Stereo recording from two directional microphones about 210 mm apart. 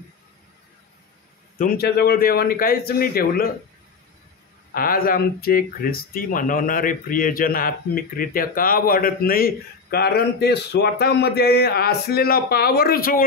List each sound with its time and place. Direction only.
1.6 s speech: 45° left (ahead or behind)
4.7 s speech: 45° left (ahead or behind)